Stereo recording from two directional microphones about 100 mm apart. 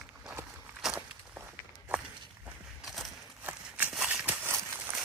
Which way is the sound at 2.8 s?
Centre (ahead or behind).